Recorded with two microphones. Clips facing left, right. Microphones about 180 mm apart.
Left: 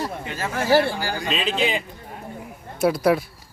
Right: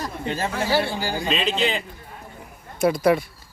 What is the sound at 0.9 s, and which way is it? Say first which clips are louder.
Speech: right 1 dB; 15° right (ahead or behind).